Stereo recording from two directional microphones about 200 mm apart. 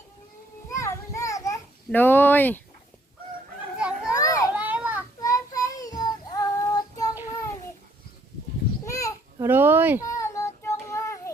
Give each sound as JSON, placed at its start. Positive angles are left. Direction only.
{"t": 0.7, "sound": "children playing", "side_deg": 15}
{"t": 3.8, "sound": "children playing", "side_deg": -5}
{"t": 4.2, "sound": "children playing", "side_deg": 15}
{"t": 4.5, "sound": "children playing", "side_deg": -5}
{"t": 5.2, "sound": "child singing", "side_deg": 15}
{"t": 8.8, "sound": "children playing", "side_deg": 15}
{"t": 9.4, "sound": "speech", "side_deg": -10}
{"t": 10.0, "sound": "child singing", "side_deg": 15}